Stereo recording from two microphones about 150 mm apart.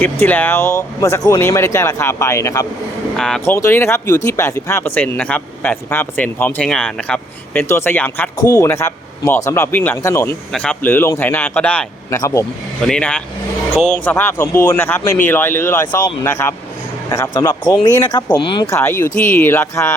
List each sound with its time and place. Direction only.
0.0 s speech: 10° left (ahead or behind)
3.2 s speech: 5° left (ahead or behind)
3.4 s speech: 15° left (ahead or behind)
8.4 s speech: 20° left (ahead or behind)
10.5 s speech: 5° left (ahead or behind)
12.1 s speech: 20° left (ahead or behind)
12.9 s speech: 5° left (ahead or behind); by 18.7 s 30° left (ahead or behind)
18.7 s speech: 15° left (ahead or behind)